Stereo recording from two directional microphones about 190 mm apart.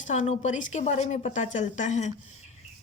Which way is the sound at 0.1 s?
40° left (ahead or behind).